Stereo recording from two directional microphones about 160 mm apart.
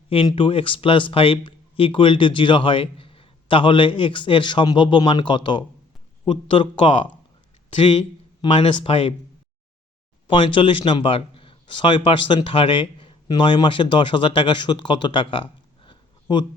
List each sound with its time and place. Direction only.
0.1 s speech: 35° left (ahead or behind)
8.4 s speech: 30° left (ahead or behind)
10.2 s speech: 30° left (ahead or behind)
15.9 s a sound: 30° left (ahead or behind)